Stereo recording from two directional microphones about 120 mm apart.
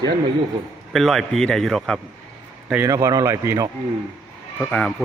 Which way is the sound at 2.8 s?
25° right (ahead or behind).